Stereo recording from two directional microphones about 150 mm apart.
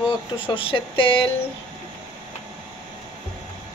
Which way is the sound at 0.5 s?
35° left (ahead or behind).